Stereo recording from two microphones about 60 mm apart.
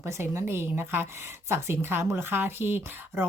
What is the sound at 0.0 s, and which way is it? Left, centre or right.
Speech, right.